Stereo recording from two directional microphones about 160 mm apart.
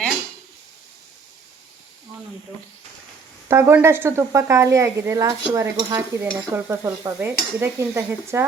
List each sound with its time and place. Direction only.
3.5 s stir: 15° right (ahead or behind)